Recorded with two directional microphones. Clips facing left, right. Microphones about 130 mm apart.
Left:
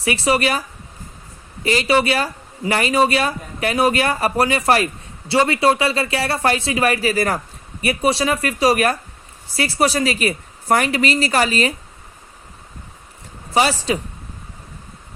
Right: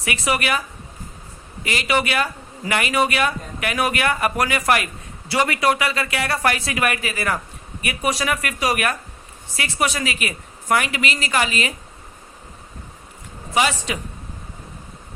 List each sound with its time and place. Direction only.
0.0 s speech: 30° left (ahead or behind)
1.6 s speech: 35° left (ahead or behind)
13.5 s speech: 35° left (ahead or behind)